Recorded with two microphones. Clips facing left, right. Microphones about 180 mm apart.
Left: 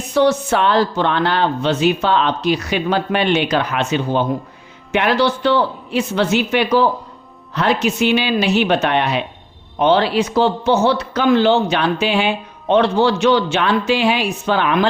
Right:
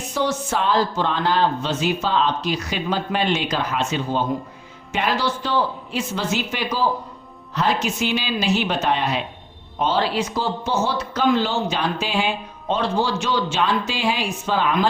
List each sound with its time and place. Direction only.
0.1 s speech: 65° left (ahead or behind)